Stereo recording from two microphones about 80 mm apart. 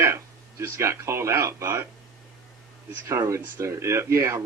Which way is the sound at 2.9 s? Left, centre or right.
Right.